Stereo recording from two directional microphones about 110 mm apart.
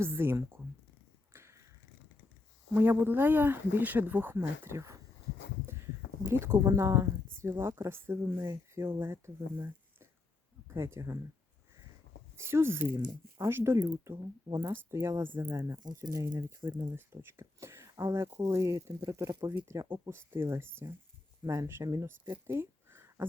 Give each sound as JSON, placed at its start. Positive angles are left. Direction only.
{"t": 0.0, "sound": "speech", "side_deg": -20}
{"t": 1.3, "sound": "a sound", "side_deg": -25}
{"t": 2.7, "sound": "speech", "side_deg": -20}
{"t": 6.2, "sound": "speech", "side_deg": -25}
{"t": 12.4, "sound": "speech", "side_deg": -25}
{"t": 22.4, "sound": "a sound", "side_deg": -20}